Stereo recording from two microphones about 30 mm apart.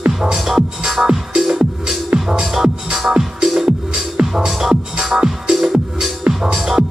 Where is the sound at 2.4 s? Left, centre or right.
Centre.